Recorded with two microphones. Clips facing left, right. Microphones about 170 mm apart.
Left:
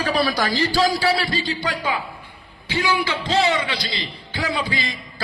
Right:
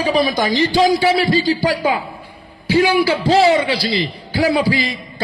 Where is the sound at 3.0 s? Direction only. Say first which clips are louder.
Right 7 dB; 35° right (ahead or behind).